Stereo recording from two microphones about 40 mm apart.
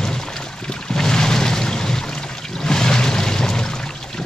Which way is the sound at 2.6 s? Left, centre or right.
Centre.